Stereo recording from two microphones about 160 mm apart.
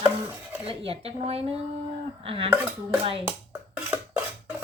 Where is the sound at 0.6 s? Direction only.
35° right (ahead or behind).